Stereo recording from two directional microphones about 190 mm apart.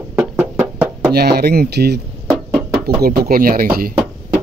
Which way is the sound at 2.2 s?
Centre (ahead or behind).